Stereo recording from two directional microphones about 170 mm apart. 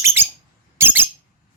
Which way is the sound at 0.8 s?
10° right (ahead or behind).